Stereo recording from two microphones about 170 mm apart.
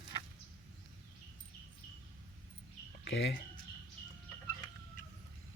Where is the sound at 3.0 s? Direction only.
90° left.